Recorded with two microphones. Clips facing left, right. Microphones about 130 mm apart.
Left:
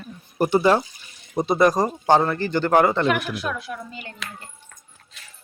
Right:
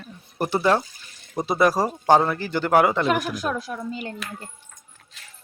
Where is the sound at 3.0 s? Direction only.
40° right (ahead or behind).